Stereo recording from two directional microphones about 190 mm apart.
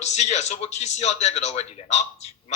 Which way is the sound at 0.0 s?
35° left (ahead or behind).